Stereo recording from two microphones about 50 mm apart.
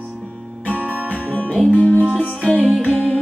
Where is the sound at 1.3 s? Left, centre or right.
Left.